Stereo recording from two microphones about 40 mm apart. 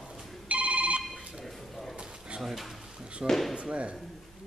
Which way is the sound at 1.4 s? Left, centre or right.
Centre.